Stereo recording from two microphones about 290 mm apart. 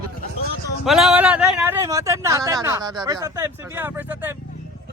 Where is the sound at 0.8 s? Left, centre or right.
Centre.